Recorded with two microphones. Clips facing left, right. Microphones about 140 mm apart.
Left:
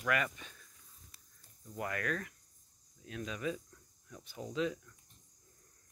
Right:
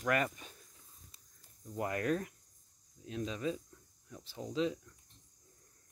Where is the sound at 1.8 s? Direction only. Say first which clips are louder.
Right 4 dB; 30° right (ahead or behind).